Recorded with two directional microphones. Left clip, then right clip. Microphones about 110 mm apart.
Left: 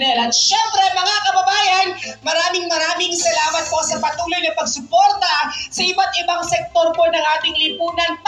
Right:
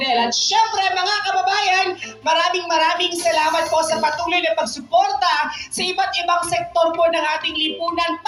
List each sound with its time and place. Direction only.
0.3 s child singing: 30° right (ahead or behind)
2.2 s speech: 45° right (ahead or behind)
5.8 s a woman's voice: 35° right (ahead or behind)